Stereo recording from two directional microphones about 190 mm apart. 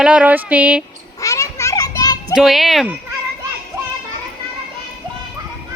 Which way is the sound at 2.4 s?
Centre (ahead or behind).